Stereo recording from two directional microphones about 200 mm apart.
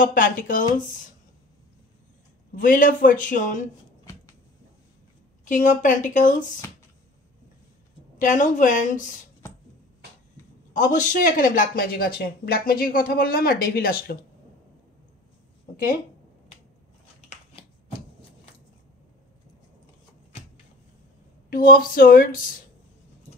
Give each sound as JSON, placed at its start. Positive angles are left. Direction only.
{"t": 0.0, "sound": "speech", "side_deg": 45}
{"t": 2.5, "sound": "a man's voice", "side_deg": 45}
{"t": 5.4, "sound": "a man's voice", "side_deg": 40}
{"t": 8.2, "sound": "a man's voice", "side_deg": 40}
{"t": 10.7, "sound": "speech", "side_deg": 40}
{"t": 21.5, "sound": "speech", "side_deg": 45}